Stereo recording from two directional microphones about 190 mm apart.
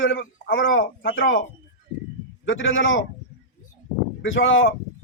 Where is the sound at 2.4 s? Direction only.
90° left.